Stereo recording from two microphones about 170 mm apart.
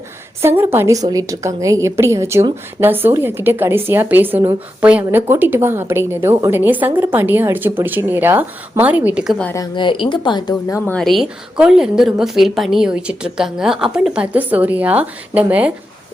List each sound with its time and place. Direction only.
0.4 s a woman's voice: 15° right (ahead or behind)
9.7 s speech: 30° left (ahead or behind)
10.8 s a woman's voice: 5° left (ahead or behind)